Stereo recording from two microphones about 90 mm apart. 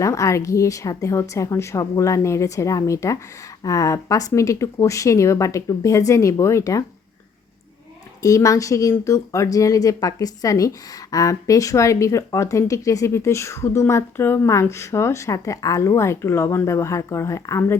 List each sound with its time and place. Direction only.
0.0 s speech: 35° left (ahead or behind)
8.2 s speech: 40° left (ahead or behind)